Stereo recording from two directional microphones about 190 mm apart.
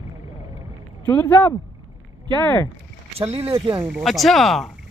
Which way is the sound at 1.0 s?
10° left (ahead or behind).